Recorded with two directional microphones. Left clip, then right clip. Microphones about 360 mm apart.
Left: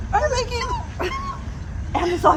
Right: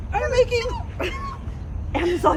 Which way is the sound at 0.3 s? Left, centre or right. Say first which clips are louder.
Right 3 dB; centre.